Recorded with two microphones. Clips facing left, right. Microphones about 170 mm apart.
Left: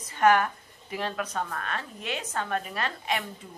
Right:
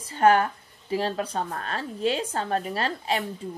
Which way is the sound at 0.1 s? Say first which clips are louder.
Right 2 dB; 30° right (ahead or behind).